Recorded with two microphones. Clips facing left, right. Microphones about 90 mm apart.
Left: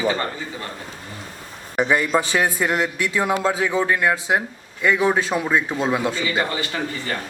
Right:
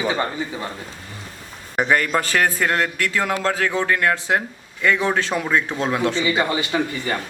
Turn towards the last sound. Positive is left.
turn(degrees=-15)  # may be behind; listen again after turning